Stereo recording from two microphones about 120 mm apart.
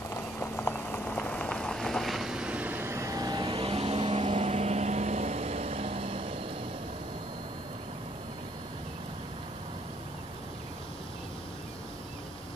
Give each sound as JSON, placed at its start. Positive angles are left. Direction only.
{"t": 0.1, "sound": "rain on surface", "side_deg": 20}
{"t": 4.3, "sound": "vehicle", "side_deg": -65}